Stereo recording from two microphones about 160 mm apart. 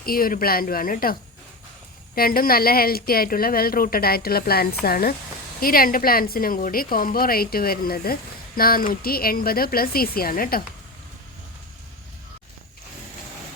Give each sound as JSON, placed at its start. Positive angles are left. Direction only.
{"t": 0.0, "sound": "a woman's voice", "side_deg": 65}
{"t": 2.1, "sound": "a woman's voice", "side_deg": 65}